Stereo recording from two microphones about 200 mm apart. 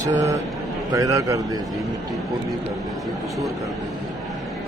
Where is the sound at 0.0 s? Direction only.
15° right (ahead or behind).